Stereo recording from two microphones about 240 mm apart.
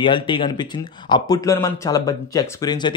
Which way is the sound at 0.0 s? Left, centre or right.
Left.